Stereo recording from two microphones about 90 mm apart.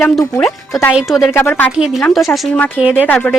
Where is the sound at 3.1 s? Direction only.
15° left (ahead or behind).